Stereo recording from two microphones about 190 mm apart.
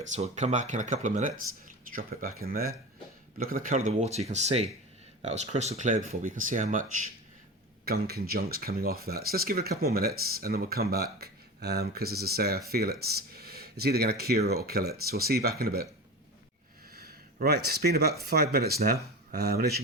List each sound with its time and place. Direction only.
0.2 s speech: 35° right (ahead or behind)
7.9 s speech: 55° right (ahead or behind)
16.9 s a sound: 55° right (ahead or behind)
18.2 s speech: 55° right (ahead or behind)